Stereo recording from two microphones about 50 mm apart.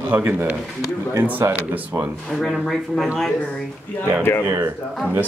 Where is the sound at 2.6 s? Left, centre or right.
Centre.